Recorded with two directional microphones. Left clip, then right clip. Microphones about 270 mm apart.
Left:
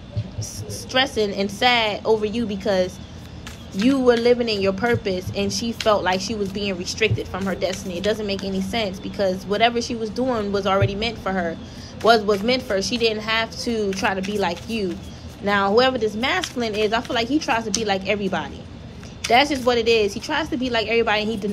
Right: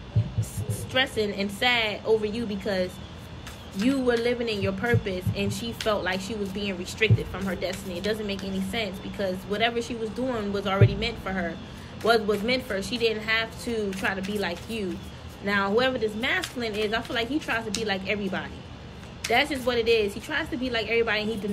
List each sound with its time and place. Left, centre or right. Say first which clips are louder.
0.9 s speech: left 5 dB; centre
4.2 s speech: left 8 dB; centre
19.3 s speech: left 7 dB; centre